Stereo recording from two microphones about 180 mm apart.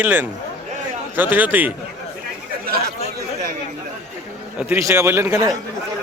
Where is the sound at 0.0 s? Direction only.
10° right (ahead or behind).